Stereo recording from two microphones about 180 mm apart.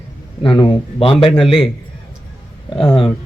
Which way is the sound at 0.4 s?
30° left (ahead or behind).